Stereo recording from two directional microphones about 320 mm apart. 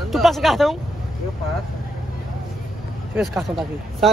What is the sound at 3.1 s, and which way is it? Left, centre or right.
Speech, centre.